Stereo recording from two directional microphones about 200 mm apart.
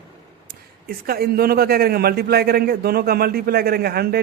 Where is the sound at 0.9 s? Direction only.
50° right (ahead or behind).